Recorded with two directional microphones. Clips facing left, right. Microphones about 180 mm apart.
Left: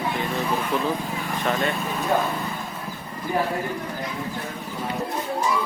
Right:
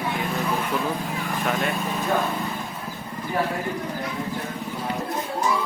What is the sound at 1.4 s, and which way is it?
Lawn mower, 5° right (ahead or behind).